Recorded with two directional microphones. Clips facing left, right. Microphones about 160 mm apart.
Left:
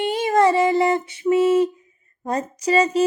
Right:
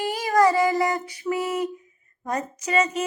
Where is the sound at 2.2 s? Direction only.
30° left (ahead or behind).